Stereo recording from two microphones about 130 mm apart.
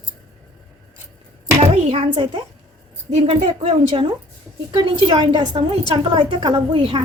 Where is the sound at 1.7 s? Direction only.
50° right (ahead or behind).